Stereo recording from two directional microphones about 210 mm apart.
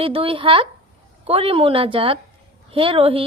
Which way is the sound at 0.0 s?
25° right (ahead or behind).